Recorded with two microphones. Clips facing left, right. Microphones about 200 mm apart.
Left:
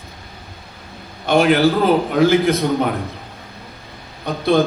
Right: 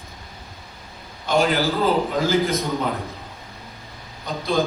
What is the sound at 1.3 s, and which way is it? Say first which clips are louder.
A man's voice: left 6 dB; 65° left (ahead or behind).